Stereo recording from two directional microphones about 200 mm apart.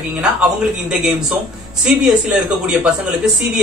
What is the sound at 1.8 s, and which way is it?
A man's voice, 5° right (ahead or behind).